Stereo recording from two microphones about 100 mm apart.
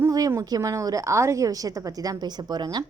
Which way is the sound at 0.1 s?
35° right (ahead or behind).